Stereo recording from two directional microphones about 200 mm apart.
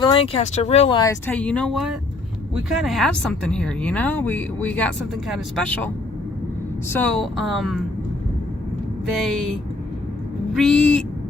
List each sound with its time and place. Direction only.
0.0 s speech: 25° left (ahead or behind)
1.3 s a woman's voice: 5° left (ahead or behind)
6.9 s a woman's voice: 5° left (ahead or behind)
9.2 s a woman's voice: centre (ahead or behind)
10.5 s a woman's voice: centre (ahead or behind)